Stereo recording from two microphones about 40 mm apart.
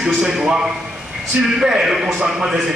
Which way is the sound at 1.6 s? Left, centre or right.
Centre.